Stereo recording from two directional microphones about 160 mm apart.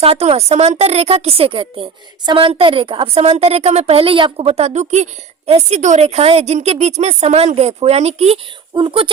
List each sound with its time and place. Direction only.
0.0 s a woman's voice: 40° right (ahead or behind)